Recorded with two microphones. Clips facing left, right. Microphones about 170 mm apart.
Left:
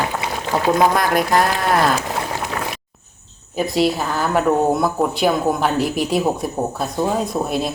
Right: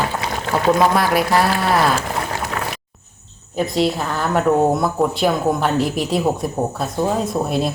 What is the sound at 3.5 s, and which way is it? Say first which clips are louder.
A woman's voice: left 1 dB; centre (ahead or behind).